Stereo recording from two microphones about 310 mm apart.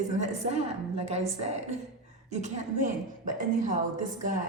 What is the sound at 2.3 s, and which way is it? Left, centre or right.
A woman's voice, right.